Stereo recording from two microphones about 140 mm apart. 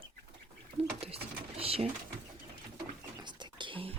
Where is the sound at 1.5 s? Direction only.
45° right (ahead or behind).